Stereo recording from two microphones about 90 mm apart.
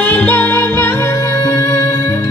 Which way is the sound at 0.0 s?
15° left (ahead or behind).